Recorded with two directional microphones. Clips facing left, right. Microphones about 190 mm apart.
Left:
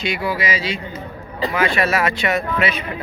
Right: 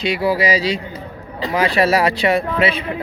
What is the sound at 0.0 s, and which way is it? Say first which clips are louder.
Speech: right 5 dB; 35° right (ahead or behind).